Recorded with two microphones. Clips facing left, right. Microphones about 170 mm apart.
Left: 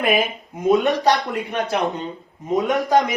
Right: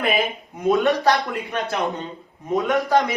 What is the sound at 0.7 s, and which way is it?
A man's voice, 15° left (ahead or behind).